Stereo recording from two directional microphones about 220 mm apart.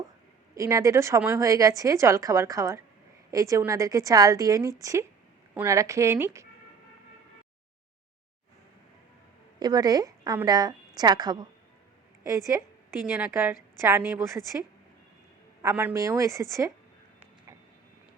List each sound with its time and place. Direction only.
0.5 s a woman's voice: 15° right (ahead or behind)
9.6 s a woman's voice: 20° right (ahead or behind)
15.6 s a woman's voice: 10° right (ahead or behind)